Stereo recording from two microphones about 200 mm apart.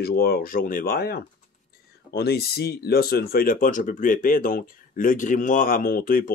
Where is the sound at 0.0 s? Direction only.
50° left (ahead or behind).